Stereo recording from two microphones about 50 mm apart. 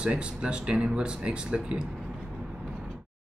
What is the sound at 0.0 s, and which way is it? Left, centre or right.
Speech, right.